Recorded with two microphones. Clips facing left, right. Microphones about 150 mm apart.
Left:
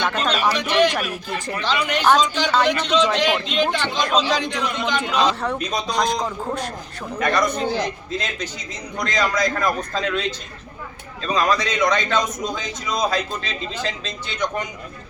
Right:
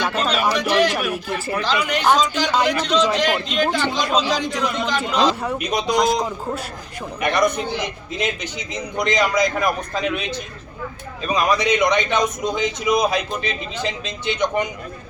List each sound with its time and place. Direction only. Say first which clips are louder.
0.0 s a man's voice: even; 10° right (ahead or behind)